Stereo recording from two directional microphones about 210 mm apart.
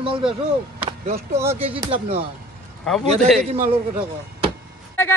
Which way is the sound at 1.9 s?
30° right (ahead or behind).